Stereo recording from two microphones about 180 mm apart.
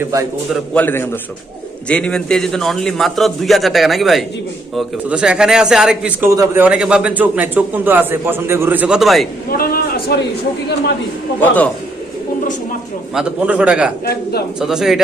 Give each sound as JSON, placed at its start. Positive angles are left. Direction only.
{"t": 0.0, "sound": "a man's voice", "side_deg": -15}
{"t": 0.5, "sound": "a man's voice", "side_deg": 5}
{"t": 9.5, "sound": "a sound", "side_deg": 55}
{"t": 11.3, "sound": "a man's voice", "side_deg": 10}
{"t": 13.1, "sound": "a man's voice", "side_deg": -5}
{"t": 14.0, "sound": "a man's voice", "side_deg": 60}
{"t": 14.6, "sound": "a man's voice", "side_deg": -5}